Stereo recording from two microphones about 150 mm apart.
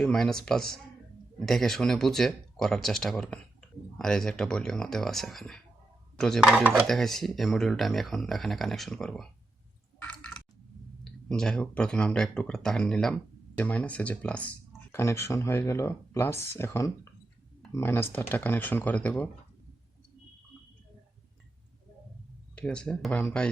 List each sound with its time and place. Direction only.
0.0 s speech: 5° left (ahead or behind)
10.0 s a sound: 10° left (ahead or behind)
11.0 s speech: 5° left (ahead or behind)
22.5 s speech: 5° left (ahead or behind)